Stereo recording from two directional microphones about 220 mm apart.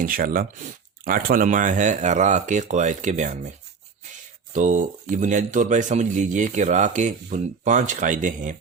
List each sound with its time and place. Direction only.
0.0 s speech: 40° right (ahead or behind)
4.5 s speech: 35° right (ahead or behind)